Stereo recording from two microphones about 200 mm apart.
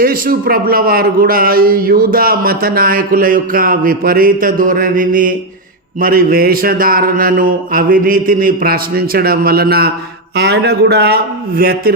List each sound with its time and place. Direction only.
0.0 s speech: 45° right (ahead or behind)